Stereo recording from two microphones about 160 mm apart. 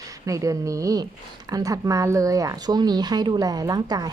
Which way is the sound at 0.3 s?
20° right (ahead or behind).